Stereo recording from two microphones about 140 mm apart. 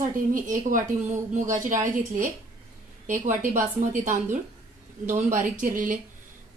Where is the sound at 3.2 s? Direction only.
65° right (ahead or behind).